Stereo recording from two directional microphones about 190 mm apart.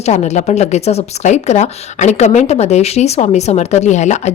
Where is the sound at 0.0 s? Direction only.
35° left (ahead or behind).